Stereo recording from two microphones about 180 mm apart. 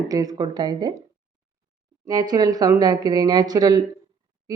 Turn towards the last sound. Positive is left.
turn(degrees=-20)  # may be behind; listen again after turning